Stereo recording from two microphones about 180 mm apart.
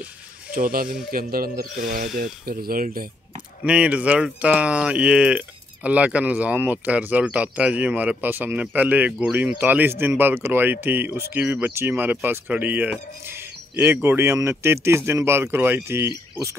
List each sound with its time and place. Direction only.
0.6 s speech: 55° right (ahead or behind)
3.6 s speech: 5° right (ahead or behind)